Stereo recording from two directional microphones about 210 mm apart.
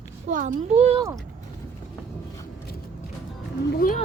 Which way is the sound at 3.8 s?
40° left (ahead or behind).